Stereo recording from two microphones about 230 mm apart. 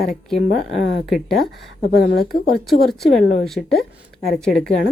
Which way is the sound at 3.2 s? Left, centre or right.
Left.